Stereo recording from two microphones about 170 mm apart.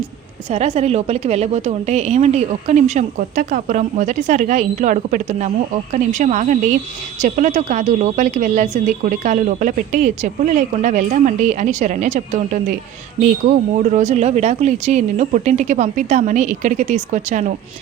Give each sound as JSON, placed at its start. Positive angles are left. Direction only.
{"t": 0.5, "sound": "a woman's voice", "side_deg": -40}